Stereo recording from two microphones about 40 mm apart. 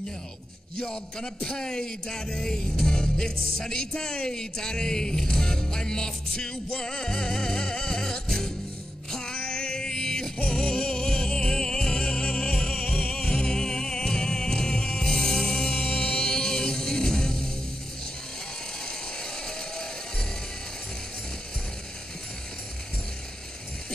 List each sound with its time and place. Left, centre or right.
0.7 s music: centre
18.9 s music: centre